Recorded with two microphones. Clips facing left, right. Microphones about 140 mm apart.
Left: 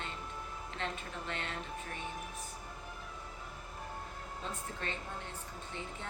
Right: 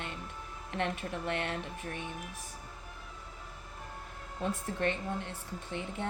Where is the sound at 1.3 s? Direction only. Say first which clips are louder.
Right 7 dB; 60° right (ahead or behind).